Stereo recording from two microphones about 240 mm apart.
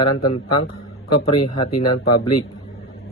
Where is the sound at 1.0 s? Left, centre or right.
Left.